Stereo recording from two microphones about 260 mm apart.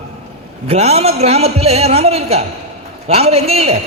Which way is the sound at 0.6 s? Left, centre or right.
Right.